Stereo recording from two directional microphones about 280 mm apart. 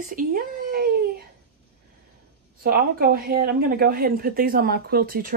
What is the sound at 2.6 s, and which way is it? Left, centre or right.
Speech, right.